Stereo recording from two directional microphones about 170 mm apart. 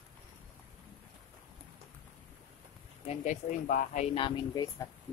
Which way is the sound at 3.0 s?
45° left (ahead or behind).